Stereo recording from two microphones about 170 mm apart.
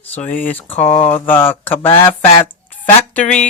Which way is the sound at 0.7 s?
45° left (ahead or behind).